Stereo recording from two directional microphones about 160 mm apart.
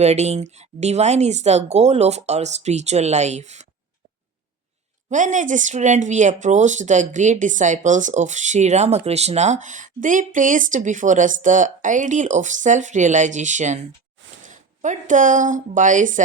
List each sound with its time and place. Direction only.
0.0 s speech: 45° right (ahead or behind)
5.0 s speech: 50° right (ahead or behind)